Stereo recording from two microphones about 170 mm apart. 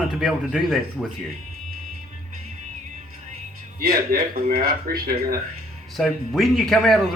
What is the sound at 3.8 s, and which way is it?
Speech, 60° right (ahead or behind).